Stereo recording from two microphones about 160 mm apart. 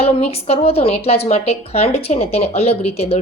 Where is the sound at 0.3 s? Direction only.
40° left (ahead or behind).